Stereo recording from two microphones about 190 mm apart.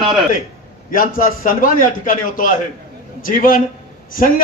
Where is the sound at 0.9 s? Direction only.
45° left (ahead or behind).